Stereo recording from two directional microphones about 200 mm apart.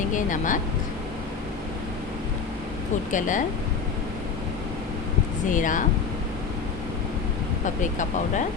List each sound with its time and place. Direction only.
0.1 s a woman's voice: 40° left (ahead or behind)
3.1 s a woman's voice: 40° left (ahead or behind)
5.5 s a woman's voice: 40° left (ahead or behind)